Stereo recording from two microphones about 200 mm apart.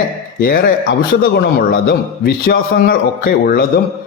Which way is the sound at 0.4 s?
50° left (ahead or behind).